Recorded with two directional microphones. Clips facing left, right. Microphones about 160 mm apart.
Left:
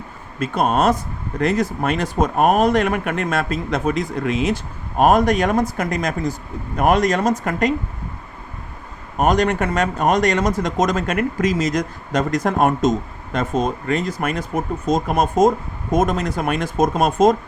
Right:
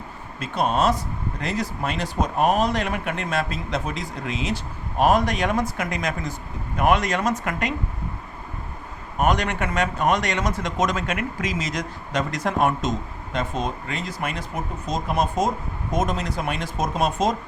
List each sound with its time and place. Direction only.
0.3 s speech: 50° left (ahead or behind)
9.1 s speech: 40° left (ahead or behind)